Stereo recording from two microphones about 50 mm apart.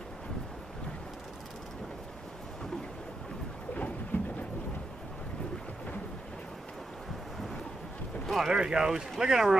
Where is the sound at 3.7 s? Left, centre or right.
Left.